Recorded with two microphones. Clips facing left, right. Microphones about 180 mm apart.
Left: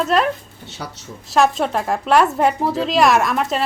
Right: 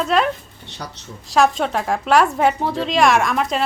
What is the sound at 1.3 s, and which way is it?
Speech, centre (ahead or behind).